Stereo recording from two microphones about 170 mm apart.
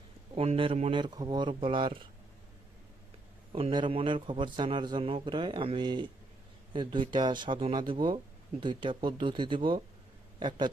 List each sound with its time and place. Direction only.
0.3 s speech: 35° right (ahead or behind)
3.5 s a man's voice: 30° right (ahead or behind)